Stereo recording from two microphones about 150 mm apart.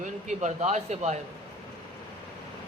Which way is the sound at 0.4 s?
50° right (ahead or behind).